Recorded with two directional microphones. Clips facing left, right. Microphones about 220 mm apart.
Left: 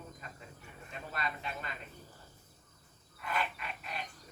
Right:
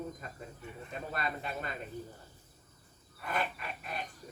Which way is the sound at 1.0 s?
45° right (ahead or behind).